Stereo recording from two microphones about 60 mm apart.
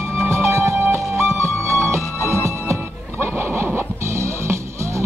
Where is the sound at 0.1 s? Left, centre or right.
Right.